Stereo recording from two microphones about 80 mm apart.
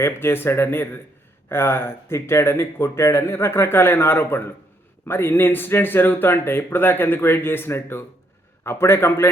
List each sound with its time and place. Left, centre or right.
0.0 s speech: left